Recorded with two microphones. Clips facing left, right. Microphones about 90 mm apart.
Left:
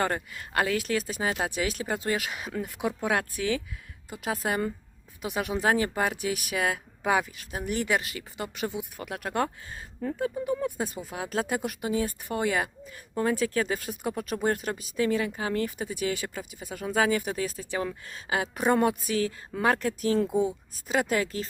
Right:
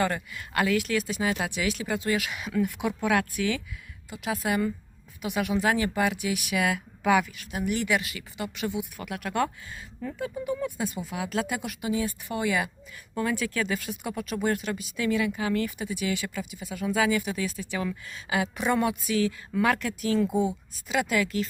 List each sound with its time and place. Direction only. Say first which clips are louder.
0.0 s speech: right 1 dB; 35° left (ahead or behind)
20.2 s speech: even; 15° right (ahead or behind)
20.8 s speech: even; 40° left (ahead or behind)